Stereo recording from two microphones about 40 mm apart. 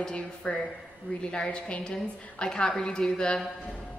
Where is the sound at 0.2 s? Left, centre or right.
Left.